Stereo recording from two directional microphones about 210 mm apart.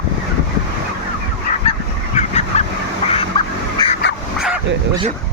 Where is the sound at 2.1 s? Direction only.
30° left (ahead or behind).